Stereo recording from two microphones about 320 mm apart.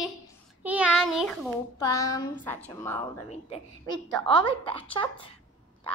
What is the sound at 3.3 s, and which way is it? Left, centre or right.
A woman's voice, centre.